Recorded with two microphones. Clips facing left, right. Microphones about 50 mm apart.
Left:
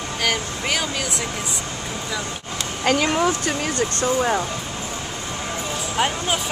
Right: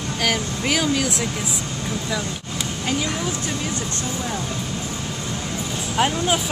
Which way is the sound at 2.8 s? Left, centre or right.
Left.